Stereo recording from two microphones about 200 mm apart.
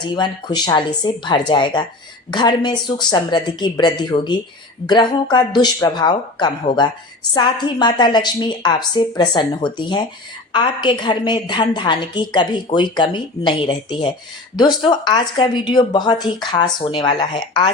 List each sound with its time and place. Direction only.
0.0 s a woman's voice: 20° left (ahead or behind)